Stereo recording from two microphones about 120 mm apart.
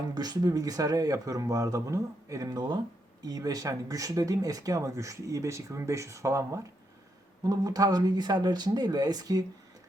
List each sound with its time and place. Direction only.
0.1 s speech: 35° right (ahead or behind)